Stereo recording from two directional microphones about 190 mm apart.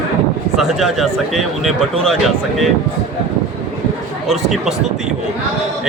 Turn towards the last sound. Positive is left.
turn(degrees=0)  # may be behind; listen again after turning